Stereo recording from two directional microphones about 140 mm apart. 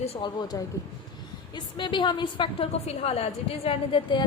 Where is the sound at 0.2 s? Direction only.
30° left (ahead or behind).